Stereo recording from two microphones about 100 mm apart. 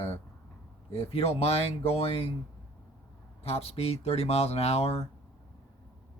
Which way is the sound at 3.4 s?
90° left.